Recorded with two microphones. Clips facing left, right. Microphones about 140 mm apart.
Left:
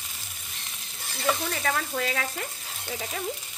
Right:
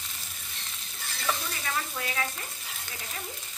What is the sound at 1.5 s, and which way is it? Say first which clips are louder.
Stir: left 6 dB; 90° left.